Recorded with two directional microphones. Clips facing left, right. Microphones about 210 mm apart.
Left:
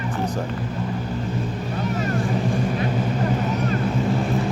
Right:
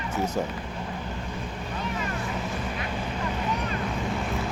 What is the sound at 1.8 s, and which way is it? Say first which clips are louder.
Vehicle: left 7 dB; 40° left (ahead or behind).